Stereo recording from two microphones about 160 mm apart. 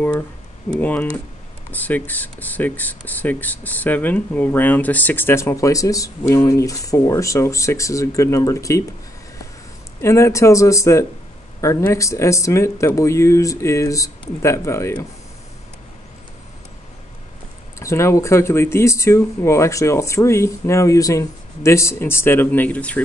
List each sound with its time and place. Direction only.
0.7 s speech: 10° left (ahead or behind)
10.0 s speech: 15° left (ahead or behind)
17.7 s speech: 20° left (ahead or behind)